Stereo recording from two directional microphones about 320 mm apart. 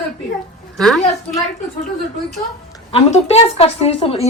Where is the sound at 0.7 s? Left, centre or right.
Centre.